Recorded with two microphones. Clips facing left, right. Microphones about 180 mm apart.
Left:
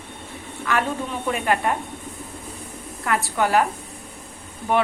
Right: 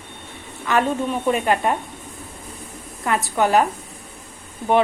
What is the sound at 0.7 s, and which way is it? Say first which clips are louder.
A woman's voice: right 4 dB; 25° right (ahead or behind).